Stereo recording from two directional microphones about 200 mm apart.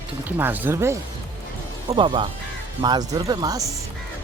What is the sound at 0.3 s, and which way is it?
Speech, 10° right (ahead or behind).